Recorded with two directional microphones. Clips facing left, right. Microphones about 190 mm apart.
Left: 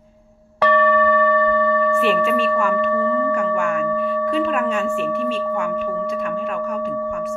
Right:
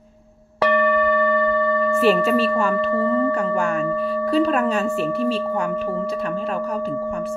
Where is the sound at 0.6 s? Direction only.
15° right (ahead or behind).